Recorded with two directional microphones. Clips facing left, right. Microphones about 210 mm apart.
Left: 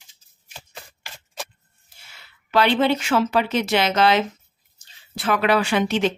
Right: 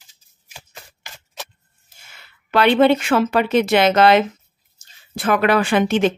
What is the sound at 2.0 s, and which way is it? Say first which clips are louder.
Speech: right 2 dB; 55° right (ahead or behind).